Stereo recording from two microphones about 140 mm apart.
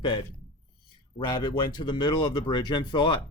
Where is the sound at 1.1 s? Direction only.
30° left (ahead or behind).